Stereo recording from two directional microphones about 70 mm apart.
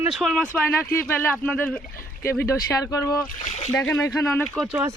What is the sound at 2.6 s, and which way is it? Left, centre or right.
Speech, left.